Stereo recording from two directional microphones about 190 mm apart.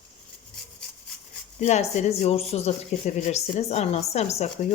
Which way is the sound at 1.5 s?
35° left (ahead or behind).